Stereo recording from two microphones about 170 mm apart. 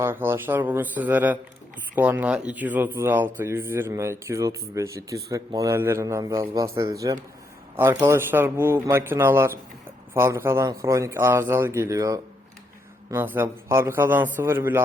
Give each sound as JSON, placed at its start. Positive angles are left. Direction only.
{"t": 0.0, "sound": "speech", "side_deg": -15}